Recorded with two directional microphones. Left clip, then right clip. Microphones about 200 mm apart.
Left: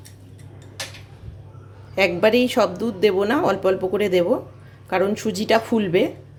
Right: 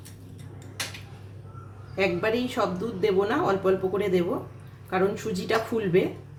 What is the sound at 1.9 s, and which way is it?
A woman's voice, 45° left (ahead or behind).